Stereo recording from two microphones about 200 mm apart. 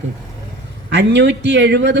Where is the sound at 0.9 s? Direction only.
60° right (ahead or behind).